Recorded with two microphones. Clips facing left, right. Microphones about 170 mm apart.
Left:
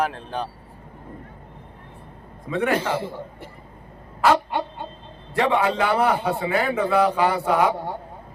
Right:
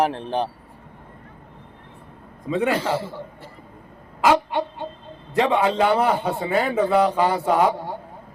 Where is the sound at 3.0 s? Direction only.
15° left (ahead or behind).